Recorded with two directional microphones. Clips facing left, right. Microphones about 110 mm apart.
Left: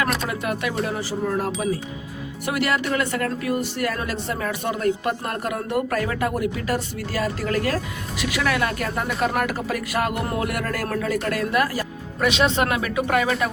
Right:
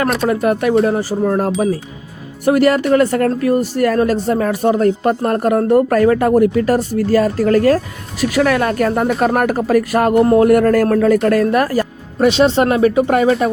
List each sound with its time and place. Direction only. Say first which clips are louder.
0.3 s speech: right 11 dB; 45° right (ahead or behind)